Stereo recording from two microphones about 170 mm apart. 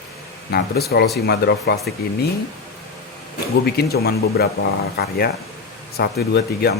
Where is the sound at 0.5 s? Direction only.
65° left (ahead or behind).